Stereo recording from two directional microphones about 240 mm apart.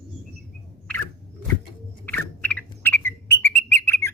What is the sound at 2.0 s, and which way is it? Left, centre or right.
Bird, centre.